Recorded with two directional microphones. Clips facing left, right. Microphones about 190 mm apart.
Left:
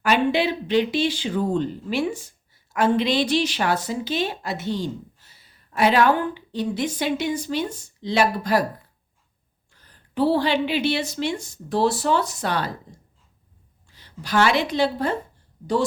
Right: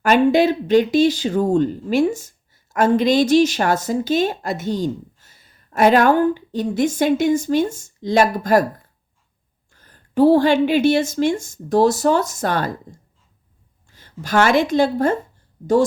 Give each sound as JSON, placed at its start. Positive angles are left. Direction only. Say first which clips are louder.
{"t": 0.0, "sound": "speech", "louder": "right 6 dB", "side_deg": -45}
{"t": 9.7, "sound": "speech", "louder": "right 7 dB", "side_deg": -50}
{"t": 13.8, "sound": "speech", "louder": "right 5 dB", "side_deg": -45}